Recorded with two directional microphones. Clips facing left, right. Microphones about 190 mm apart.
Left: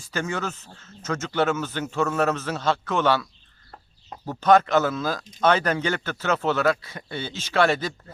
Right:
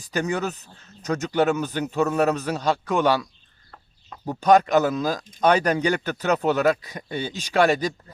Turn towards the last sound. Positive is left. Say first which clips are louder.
# right 2 dB
turn(degrees=-15)  # may be behind; listen again after turning